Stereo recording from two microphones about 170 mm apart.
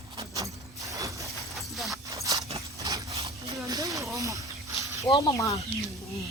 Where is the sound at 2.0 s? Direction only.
20° right (ahead or behind).